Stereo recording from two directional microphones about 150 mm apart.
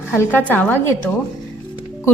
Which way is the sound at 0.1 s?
10° left (ahead or behind).